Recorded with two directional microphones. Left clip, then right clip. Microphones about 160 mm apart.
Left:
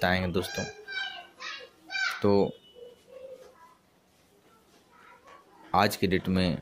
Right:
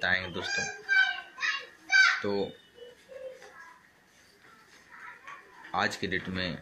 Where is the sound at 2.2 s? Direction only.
50° left (ahead or behind).